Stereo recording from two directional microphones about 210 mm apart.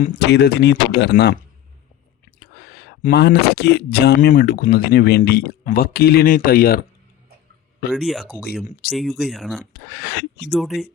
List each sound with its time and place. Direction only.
0.0 s speech: 45° left (ahead or behind)
2.4 s speech: 50° left (ahead or behind)
7.9 s speech: centre (ahead or behind)
9.9 s speech: 55° left (ahead or behind)
10.5 s speech: centre (ahead or behind)